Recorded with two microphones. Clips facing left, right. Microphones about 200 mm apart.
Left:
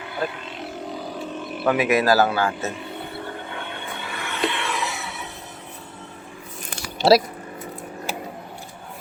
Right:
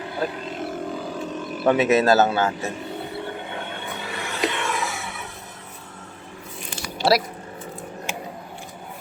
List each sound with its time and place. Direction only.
0.0 s roaring cats: 35° right (ahead or behind)
1.7 s a man's voice: 25° right (ahead or behind)
4.0 s a sound: 35° right (ahead or behind)
7.1 s speech: 25° left (ahead or behind)